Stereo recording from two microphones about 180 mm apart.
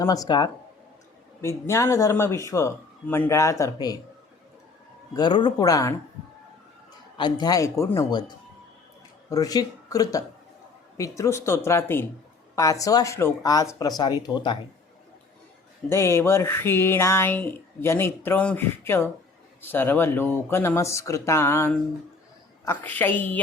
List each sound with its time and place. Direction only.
0.0 s speech: 20° left (ahead or behind)
5.1 s speech: 25° left (ahead or behind)
7.2 s speech: 25° left (ahead or behind)
9.3 s speech: 20° left (ahead or behind)
15.9 s speech: 15° left (ahead or behind)